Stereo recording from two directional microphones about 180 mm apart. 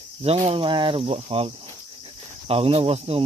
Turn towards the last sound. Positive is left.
turn(degrees=-30)  # may be behind; listen again after turning